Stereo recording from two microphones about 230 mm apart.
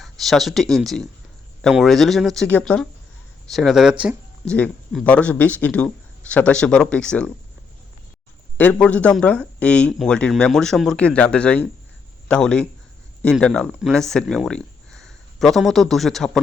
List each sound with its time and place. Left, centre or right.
0.0 s speech: centre
8.5 s speech: centre